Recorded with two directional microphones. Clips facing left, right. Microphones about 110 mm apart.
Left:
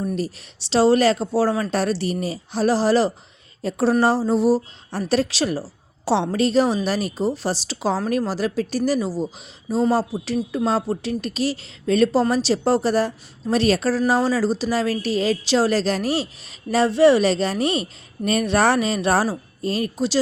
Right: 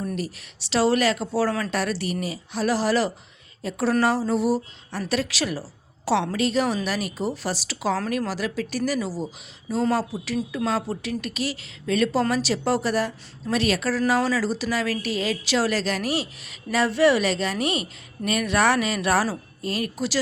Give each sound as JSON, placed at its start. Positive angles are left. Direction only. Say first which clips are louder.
{"t": 0.2, "sound": "speech", "louder": "left 4 dB", "side_deg": 30}